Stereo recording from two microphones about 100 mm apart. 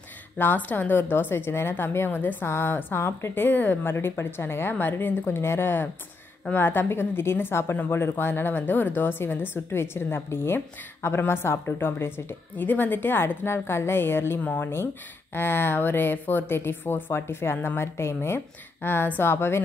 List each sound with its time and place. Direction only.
0.4 s speech: 20° left (ahead or behind)